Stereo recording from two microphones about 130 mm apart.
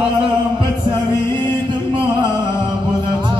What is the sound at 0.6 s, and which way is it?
Music, 35° right (ahead or behind).